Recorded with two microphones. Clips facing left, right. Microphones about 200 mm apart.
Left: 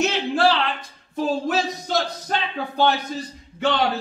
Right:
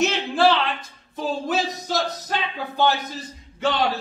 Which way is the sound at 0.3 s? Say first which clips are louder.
Right 1 dB; centre (ahead or behind).